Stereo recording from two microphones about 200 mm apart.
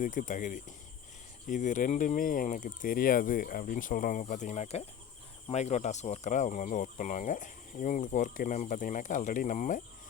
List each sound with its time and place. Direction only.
0.0 s speech: 40° left (ahead or behind)